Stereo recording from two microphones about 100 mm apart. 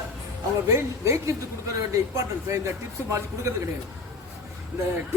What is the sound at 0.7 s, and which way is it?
A man's voice, 30° right (ahead or behind).